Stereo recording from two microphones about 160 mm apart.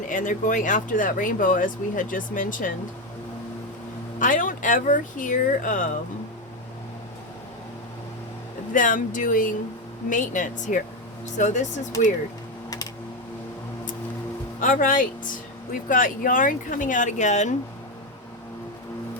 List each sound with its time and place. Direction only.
0.1 s speech: 55° left (ahead or behind)
4.2 s speech: 55° left (ahead or behind)
8.7 s speech: 55° left (ahead or behind)
14.6 s speech: 55° left (ahead or behind)